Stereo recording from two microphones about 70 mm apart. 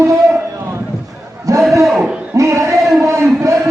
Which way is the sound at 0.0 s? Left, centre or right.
Right.